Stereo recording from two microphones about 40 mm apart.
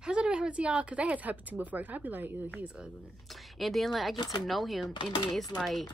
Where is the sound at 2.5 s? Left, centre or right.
Right.